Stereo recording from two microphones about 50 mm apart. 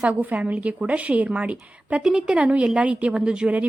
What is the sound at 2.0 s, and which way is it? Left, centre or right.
Speech, centre.